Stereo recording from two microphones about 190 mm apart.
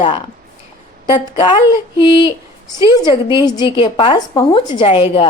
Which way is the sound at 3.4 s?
20° left (ahead or behind).